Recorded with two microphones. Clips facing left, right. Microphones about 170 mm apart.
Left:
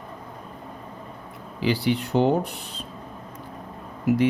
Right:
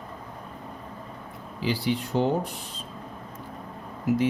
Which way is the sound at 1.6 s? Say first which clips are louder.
Left 4 dB; 65° left (ahead or behind).